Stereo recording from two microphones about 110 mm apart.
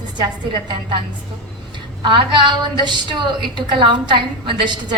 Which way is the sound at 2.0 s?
45° right (ahead or behind).